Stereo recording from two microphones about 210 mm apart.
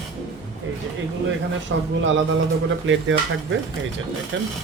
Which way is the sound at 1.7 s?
60° right (ahead or behind).